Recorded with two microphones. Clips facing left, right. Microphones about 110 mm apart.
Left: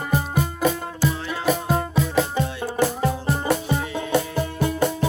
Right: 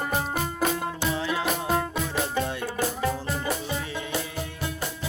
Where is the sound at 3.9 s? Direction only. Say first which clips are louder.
Left 8 dB; 60° left (ahead or behind).